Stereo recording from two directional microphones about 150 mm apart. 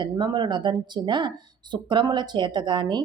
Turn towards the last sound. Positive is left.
turn(degrees=-30)  # may be behind; listen again after turning